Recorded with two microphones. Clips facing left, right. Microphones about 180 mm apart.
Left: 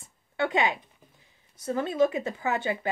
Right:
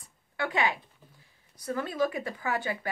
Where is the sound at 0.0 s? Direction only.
25° left (ahead or behind).